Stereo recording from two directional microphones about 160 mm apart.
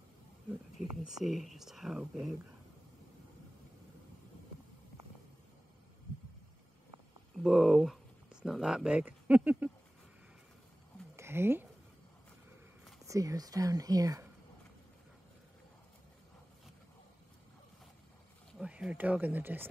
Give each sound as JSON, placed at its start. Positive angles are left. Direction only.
{"t": 0.5, "sound": "speech", "side_deg": -5}
{"t": 7.4, "sound": "speech", "side_deg": 0}
{"t": 11.1, "sound": "a sound", "side_deg": -15}
{"t": 13.0, "sound": "speech", "side_deg": -20}
{"t": 18.6, "sound": "speech", "side_deg": -5}